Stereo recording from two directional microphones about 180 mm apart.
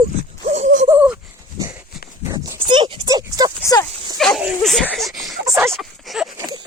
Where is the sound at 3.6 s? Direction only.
15° left (ahead or behind).